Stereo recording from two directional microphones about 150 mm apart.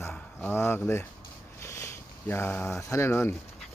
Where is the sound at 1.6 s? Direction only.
15° left (ahead or behind).